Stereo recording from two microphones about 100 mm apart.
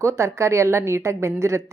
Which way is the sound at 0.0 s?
30° right (ahead or behind).